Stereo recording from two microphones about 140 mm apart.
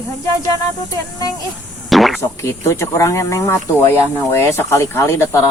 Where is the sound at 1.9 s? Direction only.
Centre (ahead or behind).